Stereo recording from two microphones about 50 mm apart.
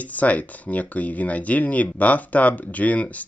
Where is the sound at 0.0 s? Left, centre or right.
Left.